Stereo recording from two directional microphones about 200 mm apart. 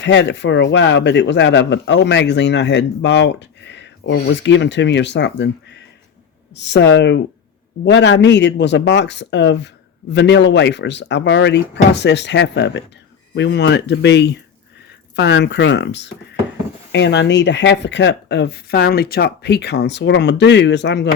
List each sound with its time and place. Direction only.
0.0 s speech: 60° left (ahead or behind)
6.5 s speech: 60° left (ahead or behind)